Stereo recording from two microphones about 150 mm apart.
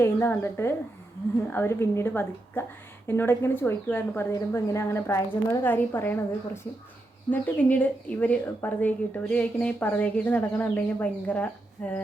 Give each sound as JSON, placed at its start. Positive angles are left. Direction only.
{"t": 0.0, "sound": "a woman's voice", "side_deg": 15}